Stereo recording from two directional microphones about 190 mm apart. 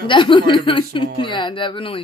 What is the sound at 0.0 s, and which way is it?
A woman's voice, 25° left (ahead or behind).